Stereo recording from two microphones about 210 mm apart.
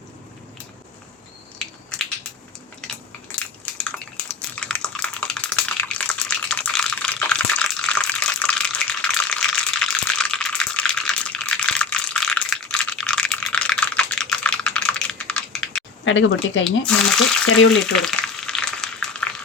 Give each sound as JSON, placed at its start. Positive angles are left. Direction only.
{"t": 4.3, "sound": "a sound", "side_deg": 5}
{"t": 16.0, "sound": "speech", "side_deg": 65}
{"t": 16.8, "sound": "speech", "side_deg": 5}
{"t": 17.7, "sound": "frying", "side_deg": 0}